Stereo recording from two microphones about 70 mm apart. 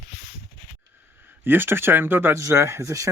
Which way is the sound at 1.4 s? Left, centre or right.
Right.